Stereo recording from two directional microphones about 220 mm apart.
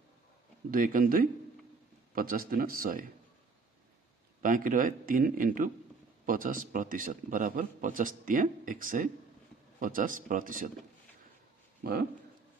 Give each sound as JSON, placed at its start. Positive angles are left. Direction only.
{"t": 0.7, "sound": "a man's voice", "side_deg": -40}
{"t": 4.4, "sound": "a man's voice", "side_deg": -35}
{"t": 11.8, "sound": "speech", "side_deg": -45}